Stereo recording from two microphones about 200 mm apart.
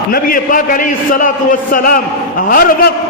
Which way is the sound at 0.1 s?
45° left (ahead or behind).